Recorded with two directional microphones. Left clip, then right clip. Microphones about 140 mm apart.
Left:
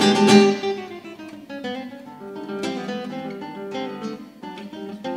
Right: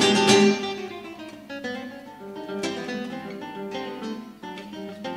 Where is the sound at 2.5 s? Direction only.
30° left (ahead or behind).